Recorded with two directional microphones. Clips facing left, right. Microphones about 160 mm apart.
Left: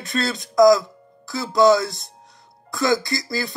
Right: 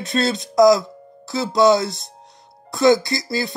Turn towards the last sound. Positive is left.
turn(degrees=-25)  # may be behind; listen again after turning